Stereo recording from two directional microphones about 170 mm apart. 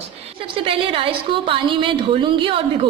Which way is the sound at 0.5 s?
30° right (ahead or behind).